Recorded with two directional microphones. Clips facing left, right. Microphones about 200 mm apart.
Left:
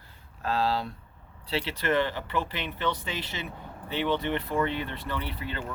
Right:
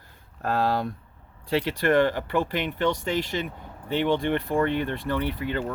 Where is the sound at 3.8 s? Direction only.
50° right (ahead or behind).